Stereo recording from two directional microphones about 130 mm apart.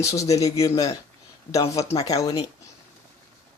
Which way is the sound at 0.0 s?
25° left (ahead or behind).